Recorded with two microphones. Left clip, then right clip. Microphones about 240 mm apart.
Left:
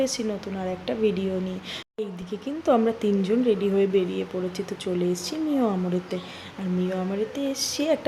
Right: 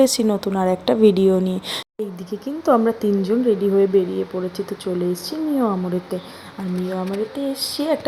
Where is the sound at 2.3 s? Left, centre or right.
Right.